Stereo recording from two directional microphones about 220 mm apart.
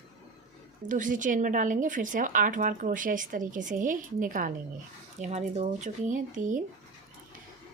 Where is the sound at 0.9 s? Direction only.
35° right (ahead or behind).